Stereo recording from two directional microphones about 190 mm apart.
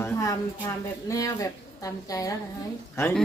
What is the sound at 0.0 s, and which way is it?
A woman's voice, 20° left (ahead or behind).